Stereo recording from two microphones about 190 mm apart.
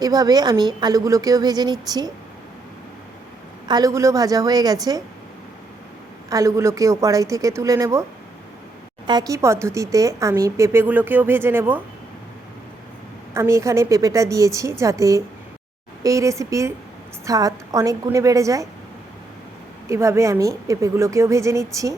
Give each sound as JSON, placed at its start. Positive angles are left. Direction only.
{"t": 0.0, "sound": "a woman's voice", "side_deg": -20}
{"t": 3.7, "sound": "a woman's voice", "side_deg": -20}
{"t": 6.3, "sound": "speech", "side_deg": -15}
{"t": 9.0, "sound": "speech", "side_deg": -20}
{"t": 13.3, "sound": "speech", "side_deg": -15}
{"t": 19.9, "sound": "speech", "side_deg": -15}